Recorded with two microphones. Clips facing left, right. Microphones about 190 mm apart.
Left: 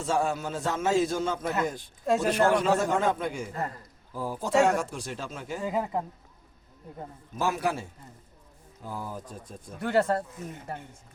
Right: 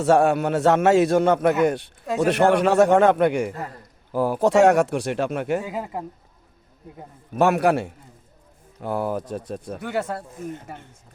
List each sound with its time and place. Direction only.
0.0 s a man's voice: 70° right (ahead or behind)
5.6 s speech: 5° right (ahead or behind)
7.3 s a man's voice: 70° right (ahead or behind)
9.8 s speech: centre (ahead or behind)